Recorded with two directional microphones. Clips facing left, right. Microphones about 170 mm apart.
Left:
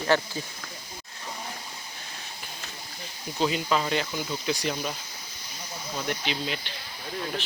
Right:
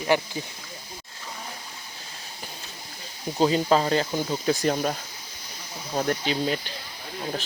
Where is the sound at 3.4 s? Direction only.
35° right (ahead or behind).